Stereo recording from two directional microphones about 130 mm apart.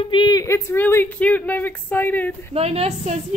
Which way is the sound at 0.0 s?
40° left (ahead or behind).